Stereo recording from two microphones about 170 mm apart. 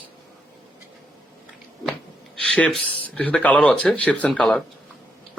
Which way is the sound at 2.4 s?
5° left (ahead or behind).